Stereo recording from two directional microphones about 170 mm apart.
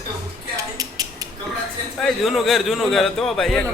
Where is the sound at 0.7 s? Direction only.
20° right (ahead or behind).